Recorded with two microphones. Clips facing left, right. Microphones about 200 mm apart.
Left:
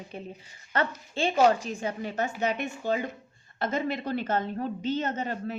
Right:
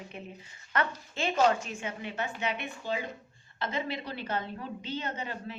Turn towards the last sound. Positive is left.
turn(degrees=45)  # may be behind; listen again after turning